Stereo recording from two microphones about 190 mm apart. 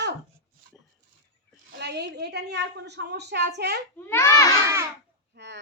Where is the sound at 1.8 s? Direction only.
60° right (ahead or behind).